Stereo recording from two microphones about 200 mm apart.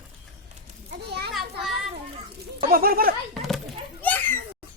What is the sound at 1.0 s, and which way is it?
Children playing, 55° right (ahead or behind).